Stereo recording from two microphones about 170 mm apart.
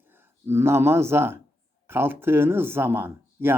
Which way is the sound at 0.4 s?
15° right (ahead or behind).